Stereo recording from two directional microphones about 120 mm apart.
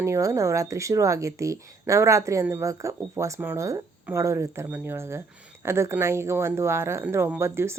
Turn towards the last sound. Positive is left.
turn(degrees=-20)  # may be behind; listen again after turning